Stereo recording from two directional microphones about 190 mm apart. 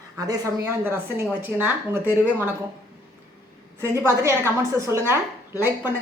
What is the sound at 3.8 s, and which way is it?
A woman's voice, 15° right (ahead or behind).